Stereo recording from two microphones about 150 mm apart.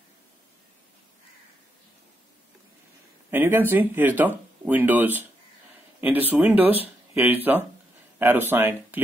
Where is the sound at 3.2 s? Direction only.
15° right (ahead or behind).